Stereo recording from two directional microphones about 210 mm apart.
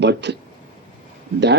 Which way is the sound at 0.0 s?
55° right (ahead or behind).